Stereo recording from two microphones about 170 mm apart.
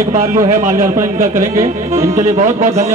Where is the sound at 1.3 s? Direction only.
15° right (ahead or behind).